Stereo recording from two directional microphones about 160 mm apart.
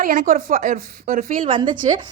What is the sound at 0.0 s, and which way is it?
Speech, 60° right (ahead or behind).